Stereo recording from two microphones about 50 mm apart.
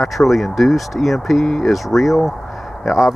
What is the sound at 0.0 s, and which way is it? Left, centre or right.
Speech, centre.